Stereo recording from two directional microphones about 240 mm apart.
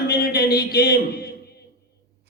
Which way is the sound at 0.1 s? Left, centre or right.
Left.